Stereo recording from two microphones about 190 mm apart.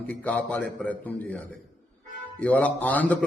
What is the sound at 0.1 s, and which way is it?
A man's voice, 10° left (ahead or behind).